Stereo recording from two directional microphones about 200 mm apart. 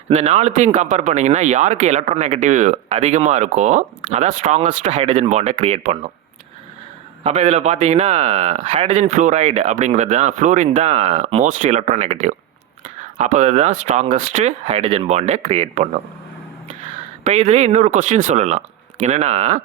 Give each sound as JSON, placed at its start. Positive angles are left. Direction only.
{"t": 0.1, "sound": "speech", "side_deg": -35}
{"t": 7.3, "sound": "speech", "side_deg": -35}
{"t": 17.2, "sound": "speech", "side_deg": -35}